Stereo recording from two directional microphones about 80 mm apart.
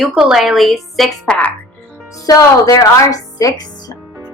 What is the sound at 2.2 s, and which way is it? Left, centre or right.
Speech, left.